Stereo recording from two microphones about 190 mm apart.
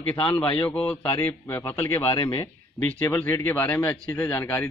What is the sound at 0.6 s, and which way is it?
Speech, 10° left (ahead or behind).